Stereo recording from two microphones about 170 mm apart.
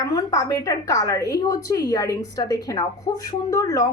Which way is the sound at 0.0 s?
20° left (ahead or behind).